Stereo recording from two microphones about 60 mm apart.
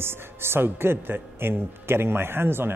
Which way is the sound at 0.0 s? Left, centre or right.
Right.